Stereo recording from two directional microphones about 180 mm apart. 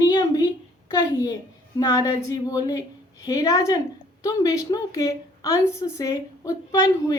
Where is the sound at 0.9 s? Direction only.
20° left (ahead or behind).